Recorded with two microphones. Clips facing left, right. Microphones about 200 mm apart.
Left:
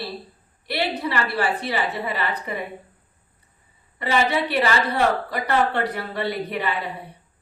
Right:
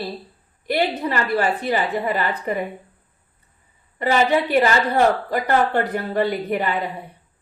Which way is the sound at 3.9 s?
45° right (ahead or behind).